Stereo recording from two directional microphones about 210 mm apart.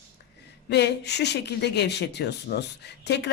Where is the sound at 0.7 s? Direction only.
55° left (ahead or behind).